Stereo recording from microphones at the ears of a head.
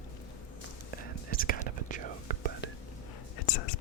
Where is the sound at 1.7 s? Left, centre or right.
Right.